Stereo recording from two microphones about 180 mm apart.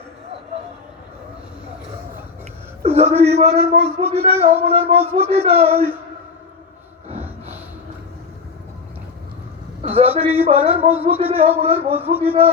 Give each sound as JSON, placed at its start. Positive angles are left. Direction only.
{"t": 2.8, "sound": "a man's voice", "side_deg": -35}
{"t": 7.1, "sound": "snort", "side_deg": -35}
{"t": 9.8, "sound": "a man's voice", "side_deg": -35}